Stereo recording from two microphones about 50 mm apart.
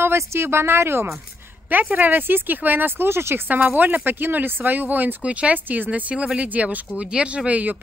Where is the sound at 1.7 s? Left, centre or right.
Right.